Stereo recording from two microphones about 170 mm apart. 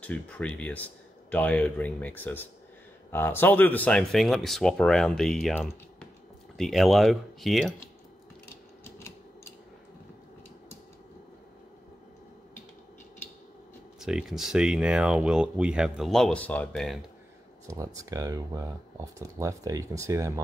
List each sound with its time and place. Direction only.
0.0 s speech: 10° left (ahead or behind)
13.9 s speech: centre (ahead or behind)
17.6 s speech: 20° right (ahead or behind)